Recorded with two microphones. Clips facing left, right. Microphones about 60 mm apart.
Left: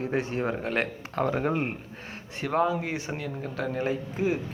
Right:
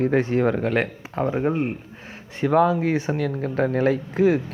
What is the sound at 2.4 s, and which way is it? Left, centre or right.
Speech, right.